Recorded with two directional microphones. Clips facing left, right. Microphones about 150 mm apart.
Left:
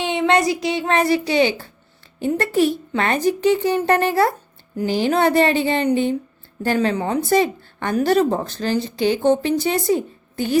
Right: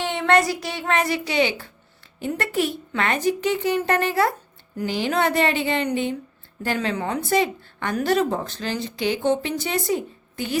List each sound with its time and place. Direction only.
0.0 s a woman's voice: 15° left (ahead or behind); by 10.6 s 35° left (ahead or behind)